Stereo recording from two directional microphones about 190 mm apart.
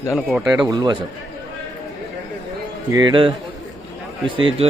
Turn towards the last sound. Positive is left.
turn(degrees=-25)  # may be behind; listen again after turning